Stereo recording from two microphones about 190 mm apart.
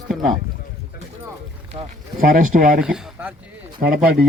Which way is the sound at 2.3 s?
45° right (ahead or behind).